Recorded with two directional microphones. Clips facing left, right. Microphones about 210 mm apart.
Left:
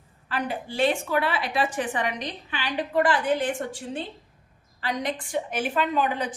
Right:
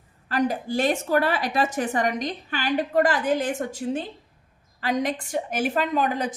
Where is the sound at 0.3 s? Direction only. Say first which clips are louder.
Right 6 dB; 40° right (ahead or behind).